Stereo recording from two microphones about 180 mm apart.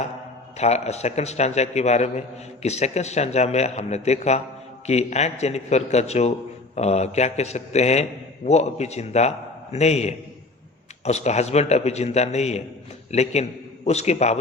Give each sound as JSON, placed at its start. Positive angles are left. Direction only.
{"t": 0.5, "sound": "a man's voice", "side_deg": 35}